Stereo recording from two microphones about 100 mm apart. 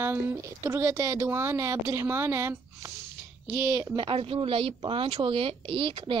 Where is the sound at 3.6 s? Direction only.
40° right (ahead or behind).